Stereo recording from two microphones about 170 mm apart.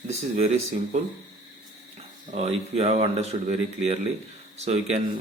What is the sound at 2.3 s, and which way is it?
Speech, 40° right (ahead or behind).